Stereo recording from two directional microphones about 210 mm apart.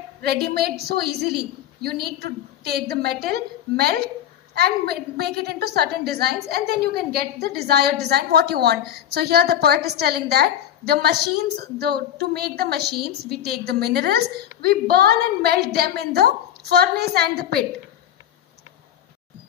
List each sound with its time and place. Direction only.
0.2 s a woman's voice: 50° right (ahead or behind)